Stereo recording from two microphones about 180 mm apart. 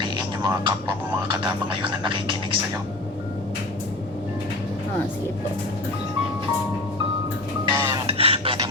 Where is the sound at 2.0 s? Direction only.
25° right (ahead or behind).